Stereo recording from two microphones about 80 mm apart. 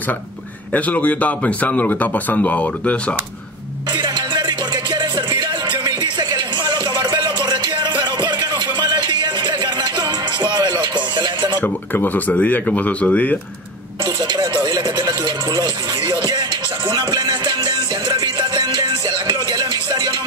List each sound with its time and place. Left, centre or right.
0.7 s speech: centre
3.9 s music: right
11.6 s speech: left
14.2 s a sound: right
16.9 s music: right